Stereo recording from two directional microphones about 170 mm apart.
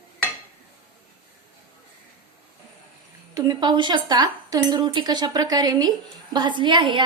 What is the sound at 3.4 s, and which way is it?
A woman's voice, 25° right (ahead or behind).